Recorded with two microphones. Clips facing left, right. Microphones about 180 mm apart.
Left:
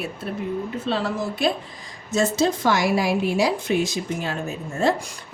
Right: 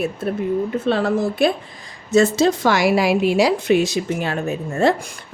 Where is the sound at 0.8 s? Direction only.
55° right (ahead or behind).